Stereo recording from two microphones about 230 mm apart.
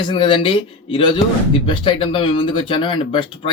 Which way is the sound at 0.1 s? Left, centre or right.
Left.